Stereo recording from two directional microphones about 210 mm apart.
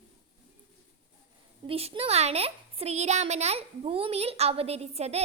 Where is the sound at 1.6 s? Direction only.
25° right (ahead or behind).